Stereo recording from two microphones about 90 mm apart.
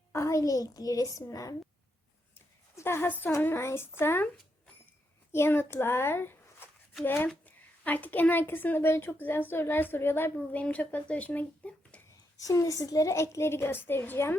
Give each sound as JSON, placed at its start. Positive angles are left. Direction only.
{"t": 0.1, "sound": "a woman's voice", "side_deg": 35}
{"t": 2.7, "sound": "a woman's voice", "side_deg": 25}
{"t": 5.3, "sound": "a child's voice", "side_deg": 25}
{"t": 10.3, "sound": "speech", "side_deg": 15}
{"t": 12.4, "sound": "a woman's voice", "side_deg": 40}